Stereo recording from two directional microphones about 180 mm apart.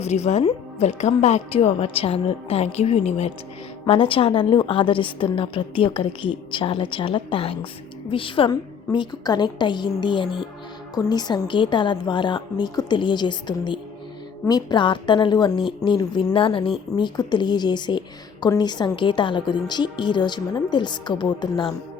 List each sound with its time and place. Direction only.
0.0 s a woman's voice: 35° left (ahead or behind)